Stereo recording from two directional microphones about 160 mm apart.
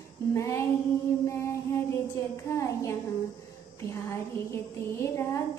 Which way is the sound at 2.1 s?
15° left (ahead or behind).